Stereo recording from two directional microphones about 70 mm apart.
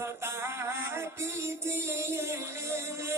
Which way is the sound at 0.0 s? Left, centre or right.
Right.